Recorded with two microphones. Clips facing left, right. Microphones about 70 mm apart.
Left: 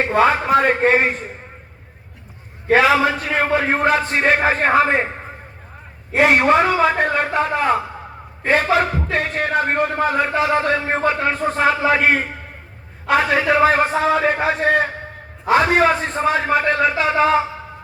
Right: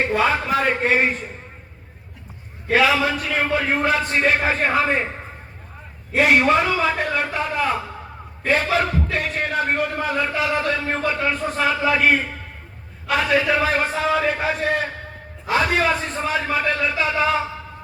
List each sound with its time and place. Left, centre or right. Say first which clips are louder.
0.5 s a man's voice: left 4 dB; left
2.6 s a man's voice: left 4 dB; left
6.1 s a man's voice: left 2 dB; left